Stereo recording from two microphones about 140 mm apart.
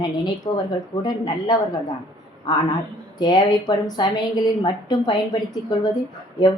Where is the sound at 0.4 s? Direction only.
30° left (ahead or behind).